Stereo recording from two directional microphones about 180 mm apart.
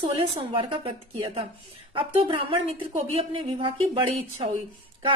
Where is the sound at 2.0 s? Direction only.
30° right (ahead or behind).